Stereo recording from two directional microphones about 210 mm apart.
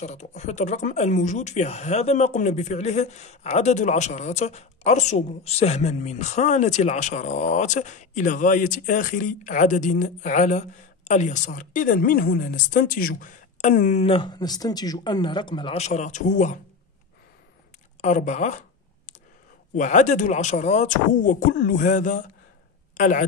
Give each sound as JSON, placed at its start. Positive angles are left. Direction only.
{"t": 0.0, "sound": "speech", "side_deg": 35}
{"t": 18.0, "sound": "speech", "side_deg": 35}
{"t": 19.7, "sound": "speech", "side_deg": 35}